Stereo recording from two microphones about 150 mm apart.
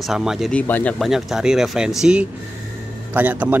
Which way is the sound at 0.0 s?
5° right (ahead or behind).